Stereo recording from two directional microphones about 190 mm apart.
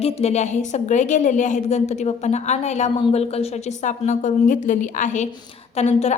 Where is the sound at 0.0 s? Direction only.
35° left (ahead or behind).